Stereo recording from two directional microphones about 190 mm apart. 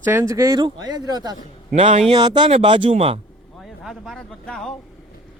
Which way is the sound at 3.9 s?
Centre (ahead or behind).